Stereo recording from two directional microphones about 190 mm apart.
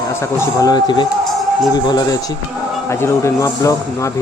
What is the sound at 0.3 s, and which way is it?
A man's voice, 20° left (ahead or behind).